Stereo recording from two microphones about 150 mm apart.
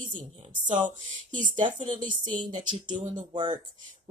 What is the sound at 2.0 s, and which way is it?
Speech, 30° right (ahead or behind).